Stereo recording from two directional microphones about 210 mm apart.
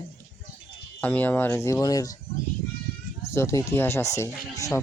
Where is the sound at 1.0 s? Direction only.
10° left (ahead or behind).